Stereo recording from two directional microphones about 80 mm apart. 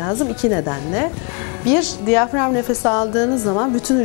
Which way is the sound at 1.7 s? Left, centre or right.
Centre.